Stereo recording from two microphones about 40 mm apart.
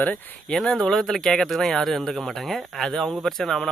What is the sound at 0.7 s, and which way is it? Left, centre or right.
Speech, centre.